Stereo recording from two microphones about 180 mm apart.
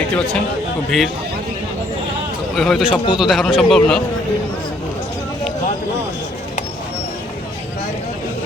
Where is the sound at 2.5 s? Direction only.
Centre (ahead or behind).